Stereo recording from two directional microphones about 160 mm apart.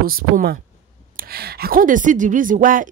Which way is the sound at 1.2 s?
75° right (ahead or behind).